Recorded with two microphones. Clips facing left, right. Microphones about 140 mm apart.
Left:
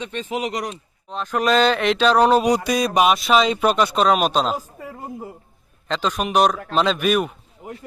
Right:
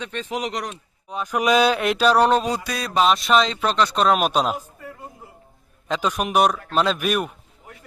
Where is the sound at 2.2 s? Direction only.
5° left (ahead or behind).